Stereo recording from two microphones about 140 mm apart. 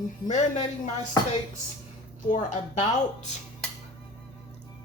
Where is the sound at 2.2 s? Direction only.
65° left (ahead or behind).